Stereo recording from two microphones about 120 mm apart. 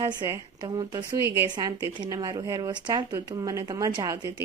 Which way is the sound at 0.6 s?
40° right (ahead or behind).